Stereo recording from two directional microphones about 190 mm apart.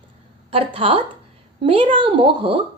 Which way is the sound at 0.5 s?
30° right (ahead or behind).